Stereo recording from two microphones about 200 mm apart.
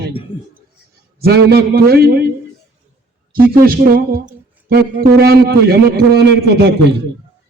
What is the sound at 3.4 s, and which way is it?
A man's voice, 45° right (ahead or behind).